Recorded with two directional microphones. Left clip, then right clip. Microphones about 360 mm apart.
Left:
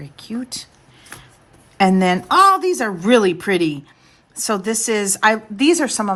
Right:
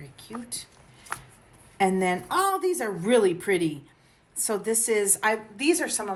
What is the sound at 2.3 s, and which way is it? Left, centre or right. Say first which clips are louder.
A woman's voice: left 14 dB; centre.